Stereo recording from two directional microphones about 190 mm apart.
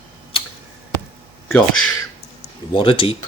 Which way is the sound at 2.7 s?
25° left (ahead or behind).